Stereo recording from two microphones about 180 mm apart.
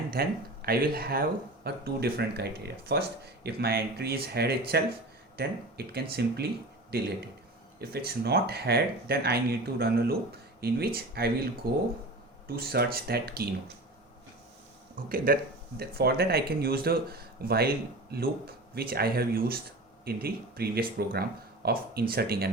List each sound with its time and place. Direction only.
0.1 s speech: 60° right (ahead or behind)
14.9 s speech: 50° right (ahead or behind)